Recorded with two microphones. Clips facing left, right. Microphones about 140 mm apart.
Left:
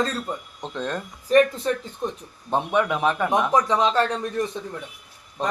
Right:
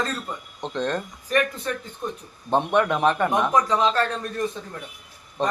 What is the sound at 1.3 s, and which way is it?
Speech, 30° left (ahead or behind).